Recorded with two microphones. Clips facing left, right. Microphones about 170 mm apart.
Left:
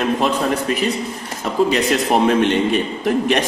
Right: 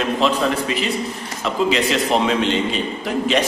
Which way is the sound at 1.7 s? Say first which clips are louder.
Left 1 dB; 50° left (ahead or behind).